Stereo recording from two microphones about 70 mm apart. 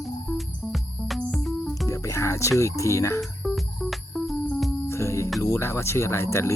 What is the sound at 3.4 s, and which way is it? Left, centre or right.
Music, centre.